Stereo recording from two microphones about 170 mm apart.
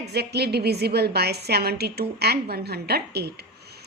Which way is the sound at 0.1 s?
75° right (ahead or behind).